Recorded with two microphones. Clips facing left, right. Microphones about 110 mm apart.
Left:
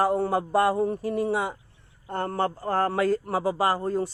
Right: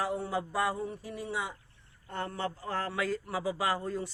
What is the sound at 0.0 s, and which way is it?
A man's voice, 50° left (ahead or behind).